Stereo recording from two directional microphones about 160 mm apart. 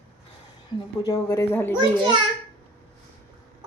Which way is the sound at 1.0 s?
20° left (ahead or behind).